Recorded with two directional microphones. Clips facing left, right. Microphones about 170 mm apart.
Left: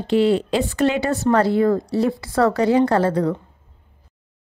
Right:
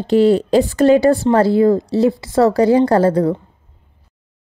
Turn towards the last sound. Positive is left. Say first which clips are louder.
# right 5 dB
turn(degrees=-30)  # may be behind; listen again after turning